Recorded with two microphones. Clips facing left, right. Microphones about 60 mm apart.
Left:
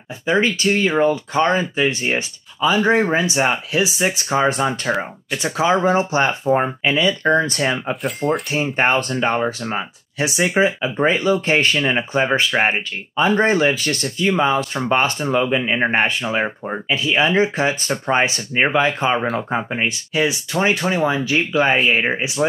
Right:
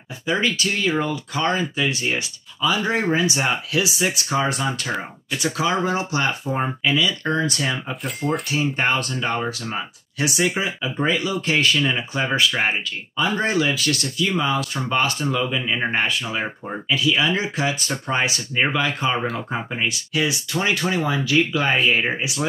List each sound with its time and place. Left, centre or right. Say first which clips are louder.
0.3 s speech: left 5 dB; left
7.9 s speech: left 4 dB; centre
8.7 s speech: left 4 dB; left